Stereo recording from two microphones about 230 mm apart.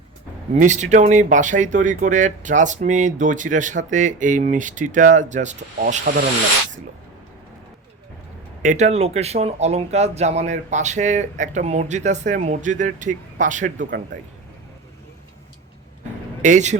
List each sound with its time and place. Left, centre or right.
0.5 s speech: right
8.6 s speech: right
16.4 s speech: right